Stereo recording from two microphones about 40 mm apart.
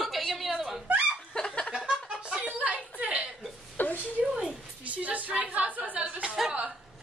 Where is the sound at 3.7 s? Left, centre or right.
Left.